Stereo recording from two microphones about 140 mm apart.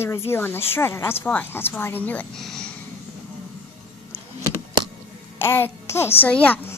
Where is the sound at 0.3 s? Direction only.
15° left (ahead or behind).